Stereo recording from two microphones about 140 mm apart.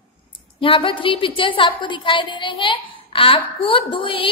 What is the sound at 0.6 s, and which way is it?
A woman's voice, 40° left (ahead or behind).